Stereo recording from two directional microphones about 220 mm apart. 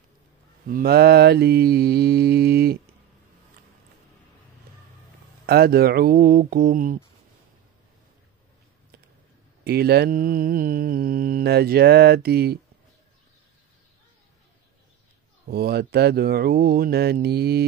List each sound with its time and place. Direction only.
0.7 s mantra: 45° right (ahead or behind)
5.5 s speech: 45° right (ahead or behind)
9.7 s mantra: 45° right (ahead or behind)
15.4 s mantra: 45° right (ahead or behind)